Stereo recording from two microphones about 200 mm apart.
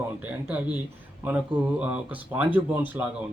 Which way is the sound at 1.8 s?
10° right (ahead or behind).